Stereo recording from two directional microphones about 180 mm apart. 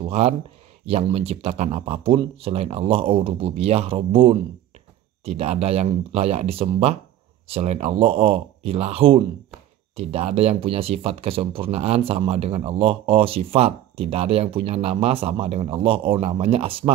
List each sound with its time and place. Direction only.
0.1 s speech: 35° right (ahead or behind)